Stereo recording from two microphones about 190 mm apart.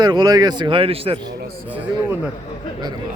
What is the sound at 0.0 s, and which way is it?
A man's voice, 20° right (ahead or behind).